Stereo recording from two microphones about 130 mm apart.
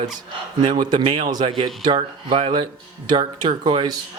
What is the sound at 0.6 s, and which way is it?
A man's voice, 35° right (ahead or behind).